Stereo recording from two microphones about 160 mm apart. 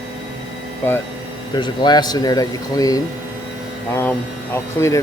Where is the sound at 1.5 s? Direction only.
25° left (ahead or behind).